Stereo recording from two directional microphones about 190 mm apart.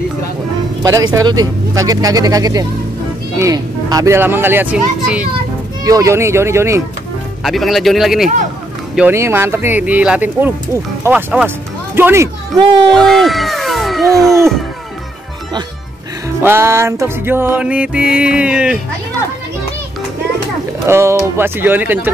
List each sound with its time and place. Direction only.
1.1 s speech: 20° right (ahead or behind)
7.4 s speech: centre (ahead or behind)
8.9 s speech: 10° right (ahead or behind)
12.9 s speech: centre (ahead or behind)
16.4 s speech: 15° right (ahead or behind)
20.8 s speech: 15° right (ahead or behind)